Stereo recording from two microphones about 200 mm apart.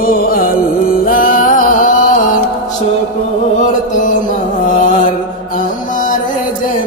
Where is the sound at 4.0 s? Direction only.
40° left (ahead or behind).